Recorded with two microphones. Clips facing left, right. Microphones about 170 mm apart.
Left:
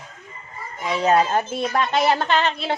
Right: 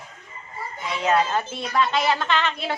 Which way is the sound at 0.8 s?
40° left (ahead or behind).